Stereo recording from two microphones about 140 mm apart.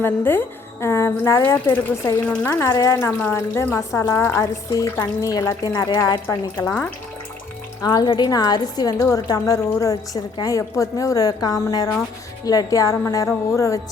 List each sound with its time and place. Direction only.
0.0 s speech: 15° left (ahead or behind)
2.2 s speech: 10° left (ahead or behind)
2.5 s speech: 20° left (ahead or behind)
7.8 s speech: 30° left (ahead or behind)